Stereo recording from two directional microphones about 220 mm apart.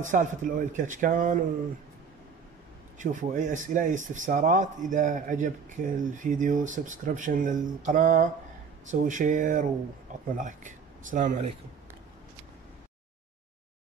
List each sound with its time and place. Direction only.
0.0 s speech: 35° right (ahead or behind)
3.0 s speech: 35° right (ahead or behind)